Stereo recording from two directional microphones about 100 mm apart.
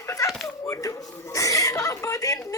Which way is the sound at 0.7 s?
35° left (ahead or behind).